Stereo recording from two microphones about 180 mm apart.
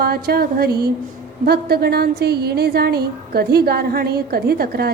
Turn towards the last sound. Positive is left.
turn(degrees=-60)  # may be behind; listen again after turning